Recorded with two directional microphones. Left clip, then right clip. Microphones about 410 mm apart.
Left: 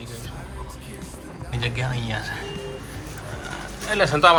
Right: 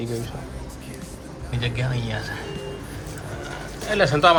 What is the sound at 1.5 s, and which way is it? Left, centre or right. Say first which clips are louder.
Speech: left 1 dB; centre.